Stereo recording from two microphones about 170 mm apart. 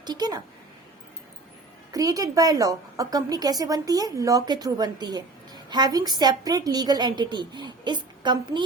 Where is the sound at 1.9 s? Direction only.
20° right (ahead or behind).